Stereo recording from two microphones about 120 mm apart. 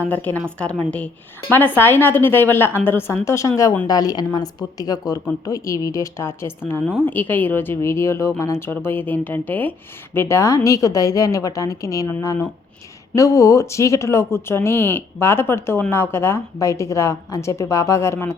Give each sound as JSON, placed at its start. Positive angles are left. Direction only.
{"t": 0.1, "sound": "a woman's voice", "side_deg": 15}